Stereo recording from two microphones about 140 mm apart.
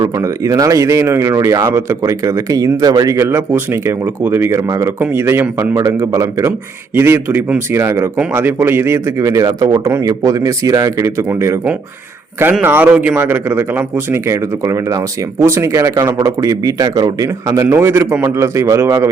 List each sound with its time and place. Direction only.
0.0 s a man's voice: 25° right (ahead or behind)